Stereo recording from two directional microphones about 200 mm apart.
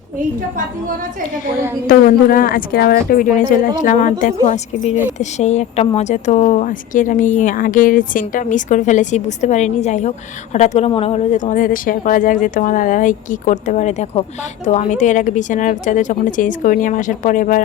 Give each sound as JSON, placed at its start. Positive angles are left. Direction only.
{"t": 1.9, "sound": "a woman's voice", "side_deg": 45}